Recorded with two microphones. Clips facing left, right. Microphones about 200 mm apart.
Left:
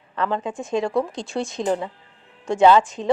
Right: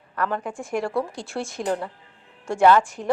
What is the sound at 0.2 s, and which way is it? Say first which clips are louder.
Speech: left 2 dB; 20° left (ahead or behind).